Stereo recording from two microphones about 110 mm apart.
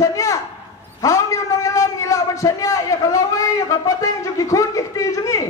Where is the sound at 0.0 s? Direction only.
30° left (ahead or behind).